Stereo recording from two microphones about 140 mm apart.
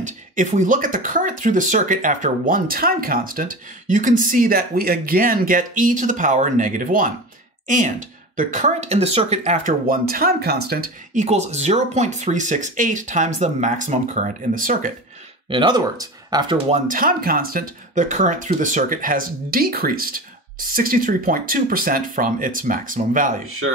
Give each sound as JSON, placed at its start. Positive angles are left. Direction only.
{"t": 0.0, "sound": "speech", "side_deg": -65}
{"t": 11.2, "sound": "speech", "side_deg": -50}
{"t": 15.5, "sound": "speech", "side_deg": -30}
{"t": 16.7, "sound": "speech", "side_deg": -70}